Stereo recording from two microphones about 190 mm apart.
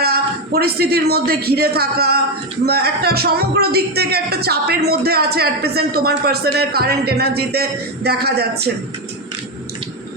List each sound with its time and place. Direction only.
0.0 s speech: 55° right (ahead or behind)